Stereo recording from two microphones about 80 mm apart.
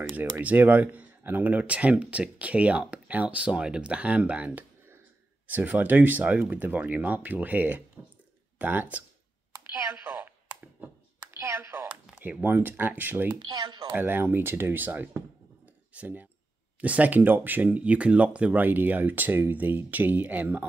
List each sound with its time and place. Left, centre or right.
0.1 s speech: centre
9.6 s computer keyboard: right
11.3 s speech: right
13.4 s speech: right
13.9 s speech: right
15.6 s a sound: centre
16.8 s speech: centre